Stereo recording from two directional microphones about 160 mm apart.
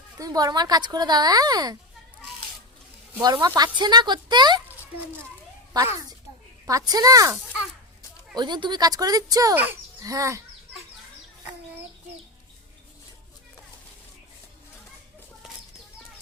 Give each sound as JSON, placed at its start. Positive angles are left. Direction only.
{"t": 0.2, "sound": "speech", "side_deg": -25}
{"t": 3.4, "sound": "speech", "side_deg": -25}
{"t": 5.7, "sound": "a child's voice", "side_deg": -25}
{"t": 8.4, "sound": "speech", "side_deg": -30}